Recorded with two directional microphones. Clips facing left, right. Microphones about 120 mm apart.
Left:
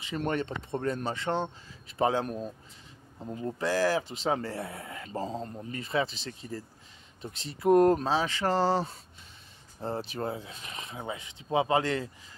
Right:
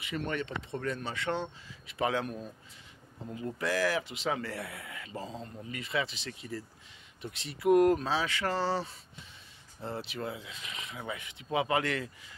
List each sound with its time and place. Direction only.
0.2 s speech: 40° left (ahead or behind)